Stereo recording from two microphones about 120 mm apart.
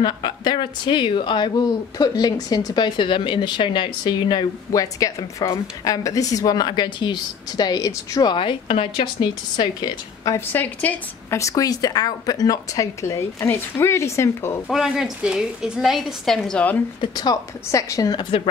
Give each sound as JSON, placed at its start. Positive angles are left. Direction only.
{"t": 0.0, "sound": "a woman's voice", "side_deg": 35}
{"t": 10.5, "sound": "a woman's voice", "side_deg": 15}
{"t": 11.3, "sound": "a woman's voice", "side_deg": 25}
{"t": 14.7, "sound": "a woman's voice", "side_deg": -5}
{"t": 17.0, "sound": "a woman's voice", "side_deg": 35}